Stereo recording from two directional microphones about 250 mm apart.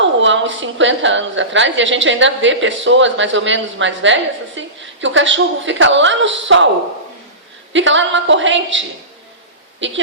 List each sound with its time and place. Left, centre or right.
0.0 s a woman's voice: right
7.7 s a woman's voice: right
9.8 s a woman's voice: right